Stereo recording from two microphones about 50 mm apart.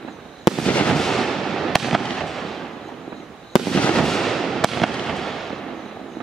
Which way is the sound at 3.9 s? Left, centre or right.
Centre.